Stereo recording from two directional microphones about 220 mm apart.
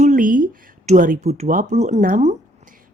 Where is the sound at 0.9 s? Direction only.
35° right (ahead or behind).